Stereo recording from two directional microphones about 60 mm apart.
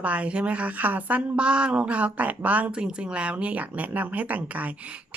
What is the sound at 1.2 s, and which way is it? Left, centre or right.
Speech, centre.